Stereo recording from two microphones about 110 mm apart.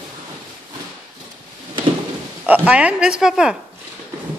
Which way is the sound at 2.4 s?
15° right (ahead or behind).